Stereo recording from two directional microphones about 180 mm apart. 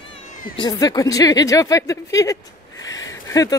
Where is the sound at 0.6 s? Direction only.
20° left (ahead or behind).